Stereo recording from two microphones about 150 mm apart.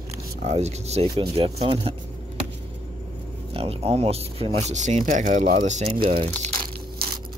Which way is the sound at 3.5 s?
40° right (ahead or behind).